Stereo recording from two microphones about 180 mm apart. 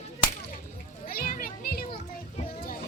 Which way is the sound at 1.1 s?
55° left (ahead or behind).